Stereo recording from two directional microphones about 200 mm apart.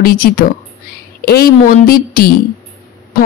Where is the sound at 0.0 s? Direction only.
45° left (ahead or behind).